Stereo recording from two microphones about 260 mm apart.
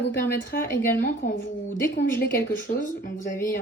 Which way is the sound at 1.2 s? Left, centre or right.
Left.